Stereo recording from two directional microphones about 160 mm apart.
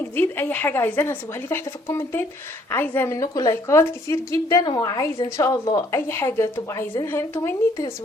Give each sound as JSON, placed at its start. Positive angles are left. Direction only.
{"t": 0.2, "sound": "a woman's voice", "side_deg": 10}